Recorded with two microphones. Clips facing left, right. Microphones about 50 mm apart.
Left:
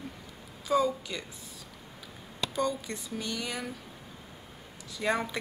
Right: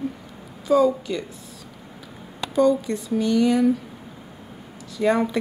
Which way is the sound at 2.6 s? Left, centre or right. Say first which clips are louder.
Right 13 dB; centre.